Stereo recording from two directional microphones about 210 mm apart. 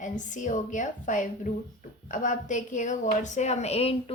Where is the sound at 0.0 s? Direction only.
35° left (ahead or behind).